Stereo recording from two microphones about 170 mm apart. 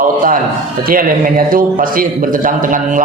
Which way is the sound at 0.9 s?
55° right (ahead or behind).